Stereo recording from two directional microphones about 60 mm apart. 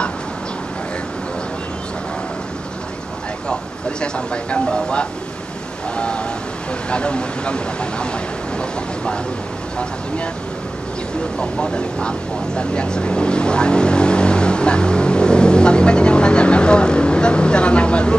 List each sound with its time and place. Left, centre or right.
4.0 s speech: centre
11.3 s speech: centre